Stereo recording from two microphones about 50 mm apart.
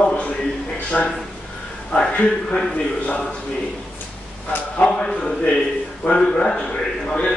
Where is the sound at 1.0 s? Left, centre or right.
Left.